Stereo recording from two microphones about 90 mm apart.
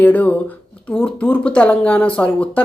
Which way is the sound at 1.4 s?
10° left (ahead or behind).